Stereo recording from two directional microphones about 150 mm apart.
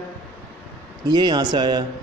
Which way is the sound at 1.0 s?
30° right (ahead or behind).